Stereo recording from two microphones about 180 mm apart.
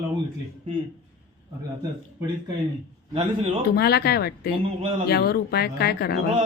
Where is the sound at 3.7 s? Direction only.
60° left (ahead or behind).